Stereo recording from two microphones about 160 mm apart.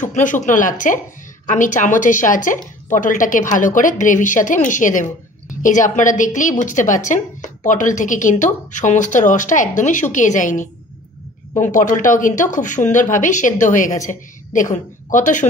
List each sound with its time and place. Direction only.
0.0 s a woman's voice: 50° left (ahead or behind)